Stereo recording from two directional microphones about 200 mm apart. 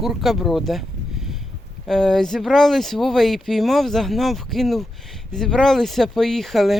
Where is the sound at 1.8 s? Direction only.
Centre (ahead or behind).